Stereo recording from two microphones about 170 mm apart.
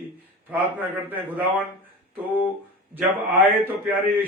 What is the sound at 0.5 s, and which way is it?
A man's voice, 10° right (ahead or behind).